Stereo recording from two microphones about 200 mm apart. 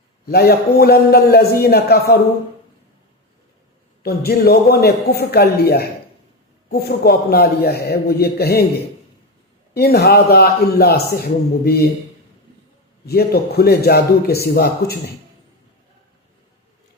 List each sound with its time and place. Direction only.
0.3 s a man's voice: 50° left (ahead or behind)
4.0 s a man's voice: 50° left (ahead or behind)
9.7 s a man's voice: 50° left (ahead or behind)
13.1 s a man's voice: 50° left (ahead or behind)